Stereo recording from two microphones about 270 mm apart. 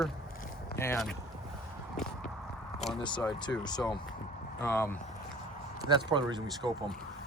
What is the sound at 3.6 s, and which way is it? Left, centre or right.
Speech, centre.